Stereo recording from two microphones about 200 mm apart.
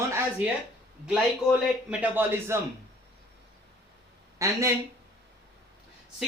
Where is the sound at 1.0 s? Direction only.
5° right (ahead or behind).